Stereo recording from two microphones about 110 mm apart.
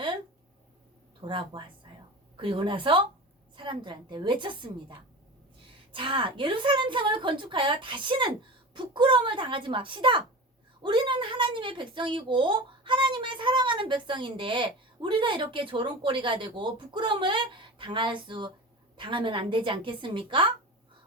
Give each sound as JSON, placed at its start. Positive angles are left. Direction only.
{"t": 1.2, "sound": "a woman's voice", "side_deg": -50}